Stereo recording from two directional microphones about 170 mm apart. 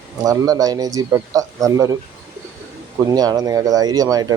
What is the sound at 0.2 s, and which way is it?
Speech, 20° right (ahead or behind).